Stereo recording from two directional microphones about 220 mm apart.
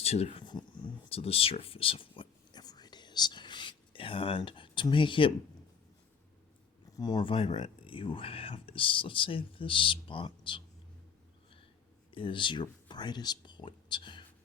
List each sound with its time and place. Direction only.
0.0 s speech: 25° left (ahead or behind)
6.9 s speech: 20° left (ahead or behind)
12.1 s speech: 25° left (ahead or behind)